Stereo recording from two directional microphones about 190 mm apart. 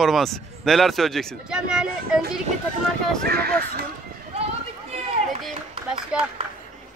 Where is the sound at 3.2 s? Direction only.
55° right (ahead or behind).